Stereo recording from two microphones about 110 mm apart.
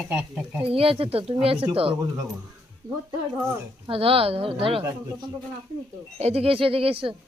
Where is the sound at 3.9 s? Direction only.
60° right (ahead or behind).